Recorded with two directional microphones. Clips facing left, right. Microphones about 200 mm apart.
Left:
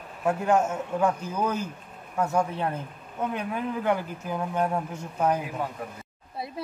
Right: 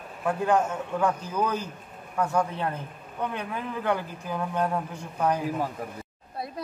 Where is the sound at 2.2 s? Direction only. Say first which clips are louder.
Even; 25° left (ahead or behind).